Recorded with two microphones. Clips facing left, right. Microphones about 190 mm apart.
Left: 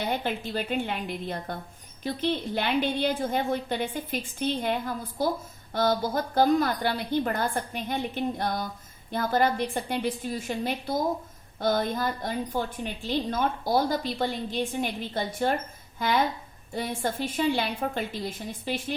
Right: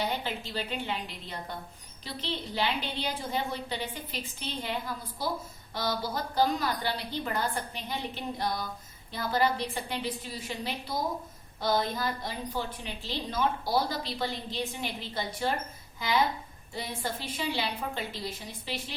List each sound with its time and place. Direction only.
0.0 s a woman's voice: 50° left (ahead or behind)